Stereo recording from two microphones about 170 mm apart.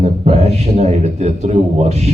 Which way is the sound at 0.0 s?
40° right (ahead or behind).